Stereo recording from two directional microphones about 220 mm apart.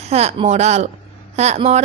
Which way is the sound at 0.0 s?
30° right (ahead or behind).